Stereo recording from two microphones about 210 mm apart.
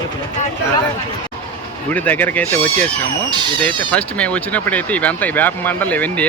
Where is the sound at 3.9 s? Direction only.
5° left (ahead or behind).